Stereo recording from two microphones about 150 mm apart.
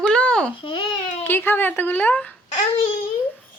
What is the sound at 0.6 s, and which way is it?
Speech, 35° left (ahead or behind).